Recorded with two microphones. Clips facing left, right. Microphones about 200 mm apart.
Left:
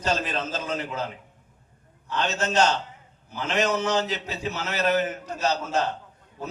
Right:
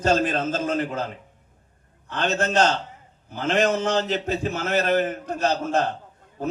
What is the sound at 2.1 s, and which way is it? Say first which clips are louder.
A man's voice: right 3 dB; 55° right (ahead or behind).